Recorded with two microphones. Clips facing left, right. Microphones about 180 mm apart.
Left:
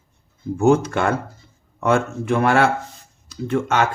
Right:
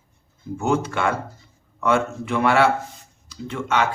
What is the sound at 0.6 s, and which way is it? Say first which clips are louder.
A man's voice: left 6 dB; 45° left (ahead or behind).